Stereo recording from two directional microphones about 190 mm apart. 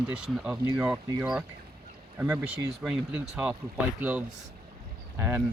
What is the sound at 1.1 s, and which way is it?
Speech, 20° right (ahead or behind).